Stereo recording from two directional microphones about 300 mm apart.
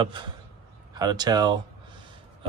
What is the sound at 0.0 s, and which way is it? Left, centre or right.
Speech, centre.